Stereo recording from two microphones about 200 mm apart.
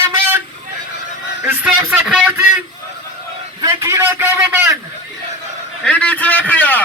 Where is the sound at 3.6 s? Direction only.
15° right (ahead or behind).